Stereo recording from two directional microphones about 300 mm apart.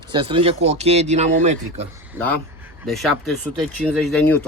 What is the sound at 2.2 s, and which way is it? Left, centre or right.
Speech, centre.